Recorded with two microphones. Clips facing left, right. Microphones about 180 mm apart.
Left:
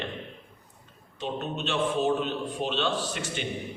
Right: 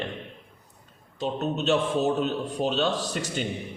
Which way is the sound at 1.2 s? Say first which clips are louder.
Right 4 dB; 40° right (ahead or behind).